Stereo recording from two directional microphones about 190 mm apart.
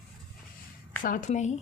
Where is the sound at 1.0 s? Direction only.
45° left (ahead or behind).